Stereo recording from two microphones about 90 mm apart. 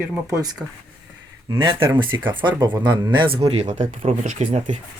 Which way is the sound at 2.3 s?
60° right (ahead or behind).